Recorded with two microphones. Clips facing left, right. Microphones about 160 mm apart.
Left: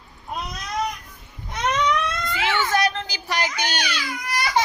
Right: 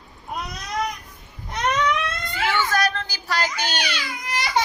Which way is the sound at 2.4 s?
20° left (ahead or behind).